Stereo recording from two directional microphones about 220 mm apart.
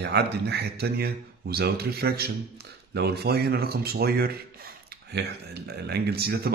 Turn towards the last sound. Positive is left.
turn(degrees=-45)  # may be behind; listen again after turning